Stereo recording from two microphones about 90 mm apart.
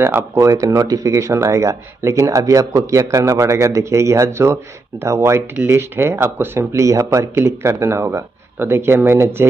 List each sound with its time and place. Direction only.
0.0 s speech: 25° right (ahead or behind)
6.7 s speech: 35° right (ahead or behind)